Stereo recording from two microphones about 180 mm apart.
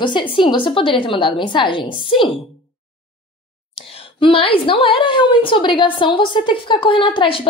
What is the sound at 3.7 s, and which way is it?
A woman's voice, 30° left (ahead or behind).